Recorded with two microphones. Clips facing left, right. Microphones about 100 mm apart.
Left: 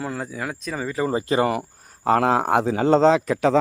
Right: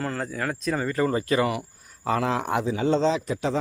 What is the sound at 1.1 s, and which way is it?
Speech, 25° left (ahead or behind).